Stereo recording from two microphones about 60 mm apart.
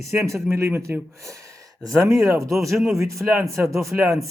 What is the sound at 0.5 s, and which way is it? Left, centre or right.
Speech, right.